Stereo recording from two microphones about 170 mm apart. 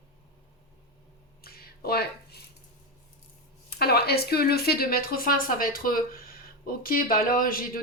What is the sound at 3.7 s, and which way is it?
Speech, 70° left (ahead or behind).